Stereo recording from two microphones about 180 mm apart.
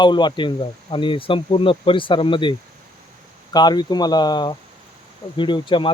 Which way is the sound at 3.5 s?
25° left (ahead or behind).